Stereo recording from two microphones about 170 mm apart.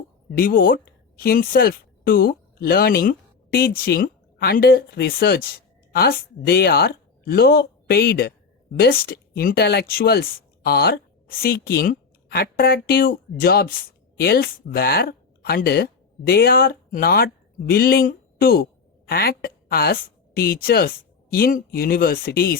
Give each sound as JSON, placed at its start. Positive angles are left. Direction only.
{"t": 0.3, "sound": "a woman's voice", "side_deg": 55}